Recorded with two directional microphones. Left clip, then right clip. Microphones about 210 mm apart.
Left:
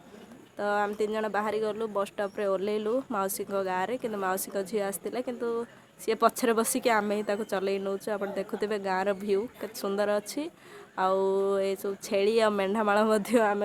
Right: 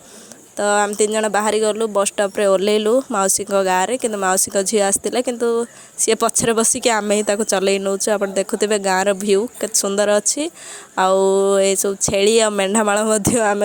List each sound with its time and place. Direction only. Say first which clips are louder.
0.5 s speech: right 11 dB; 35° right (ahead or behind)